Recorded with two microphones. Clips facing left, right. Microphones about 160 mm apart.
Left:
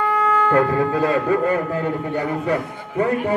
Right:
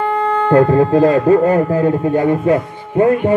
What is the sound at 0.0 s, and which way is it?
A man's voice, 30° right (ahead or behind).